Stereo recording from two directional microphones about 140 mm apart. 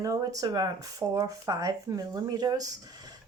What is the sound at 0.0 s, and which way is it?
Speech, 25° right (ahead or behind).